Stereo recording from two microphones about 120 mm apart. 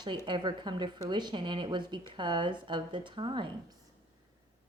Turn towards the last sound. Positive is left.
turn(degrees=-40)  # may be behind; listen again after turning